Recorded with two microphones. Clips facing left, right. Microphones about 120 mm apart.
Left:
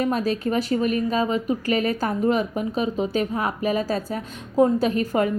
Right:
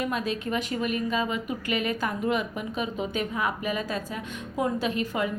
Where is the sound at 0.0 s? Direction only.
35° left (ahead or behind).